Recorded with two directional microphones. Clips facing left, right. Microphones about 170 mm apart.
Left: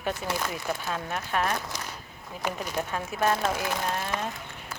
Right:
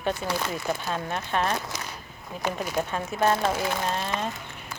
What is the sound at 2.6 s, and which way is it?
Speech, 10° right (ahead or behind).